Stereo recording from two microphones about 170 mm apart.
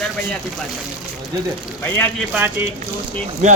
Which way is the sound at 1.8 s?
10° left (ahead or behind).